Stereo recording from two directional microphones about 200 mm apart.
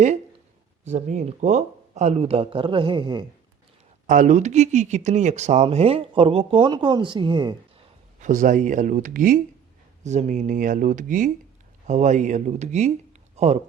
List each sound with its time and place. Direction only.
0.9 s speech: 35° right (ahead or behind)
4.0 s speech: 40° right (ahead or behind); by 7.5 s 25° right (ahead or behind)
8.2 s speech: 40° right (ahead or behind)